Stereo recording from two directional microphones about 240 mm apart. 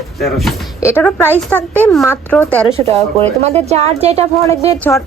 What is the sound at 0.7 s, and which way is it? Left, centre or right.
Speech, centre.